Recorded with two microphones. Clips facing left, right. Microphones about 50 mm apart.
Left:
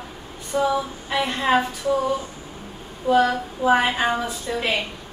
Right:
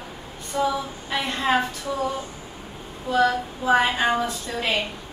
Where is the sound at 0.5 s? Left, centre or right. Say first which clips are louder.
Left 2 dB; centre.